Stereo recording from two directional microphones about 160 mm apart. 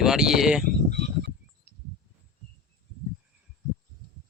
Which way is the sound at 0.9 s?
90° right.